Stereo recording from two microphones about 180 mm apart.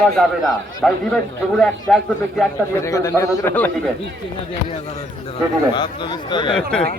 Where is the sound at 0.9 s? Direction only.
Centre (ahead or behind).